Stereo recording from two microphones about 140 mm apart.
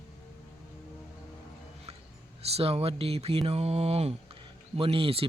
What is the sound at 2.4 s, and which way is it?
Speech, 45° right (ahead or behind).